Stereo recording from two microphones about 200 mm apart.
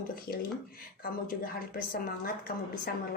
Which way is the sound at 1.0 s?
45° left (ahead or behind).